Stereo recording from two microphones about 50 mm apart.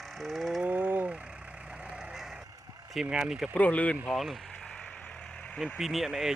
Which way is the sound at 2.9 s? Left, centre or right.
Centre.